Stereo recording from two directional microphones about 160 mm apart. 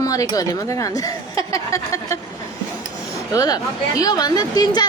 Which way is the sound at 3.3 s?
25° left (ahead or behind).